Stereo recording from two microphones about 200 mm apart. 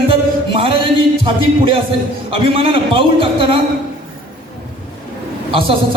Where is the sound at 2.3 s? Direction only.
25° right (ahead or behind).